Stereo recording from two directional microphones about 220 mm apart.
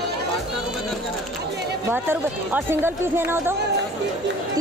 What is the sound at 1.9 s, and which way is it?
Speech, 10° right (ahead or behind).